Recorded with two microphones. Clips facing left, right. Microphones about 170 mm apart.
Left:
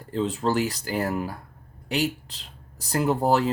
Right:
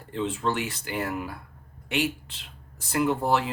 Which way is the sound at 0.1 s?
35° left (ahead or behind).